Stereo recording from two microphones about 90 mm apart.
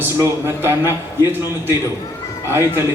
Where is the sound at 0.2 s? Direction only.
30° right (ahead or behind).